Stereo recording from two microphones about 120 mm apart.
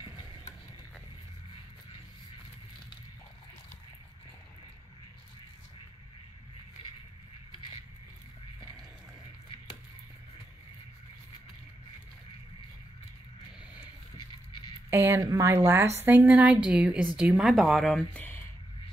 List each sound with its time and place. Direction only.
14.9 s a woman's voice: 20° right (ahead or behind); by 18.4 s 15° left (ahead or behind)